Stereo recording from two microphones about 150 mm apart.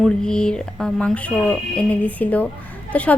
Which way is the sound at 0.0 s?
5° left (ahead or behind).